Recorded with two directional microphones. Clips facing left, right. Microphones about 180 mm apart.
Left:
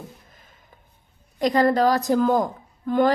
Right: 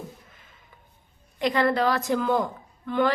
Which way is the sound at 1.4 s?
40° left (ahead or behind).